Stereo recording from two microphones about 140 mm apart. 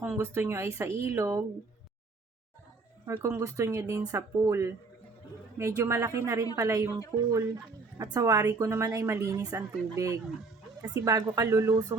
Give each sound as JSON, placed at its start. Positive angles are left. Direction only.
{"t": 0.0, "sound": "a woman's voice", "side_deg": -15}
{"t": 3.1, "sound": "a woman's voice", "side_deg": -15}